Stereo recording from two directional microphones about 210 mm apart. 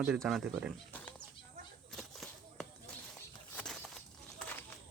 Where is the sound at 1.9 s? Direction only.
Centre (ahead or behind).